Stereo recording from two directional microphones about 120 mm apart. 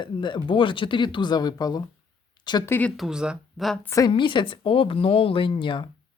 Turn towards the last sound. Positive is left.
turn(degrees=45)  # may be behind; listen again after turning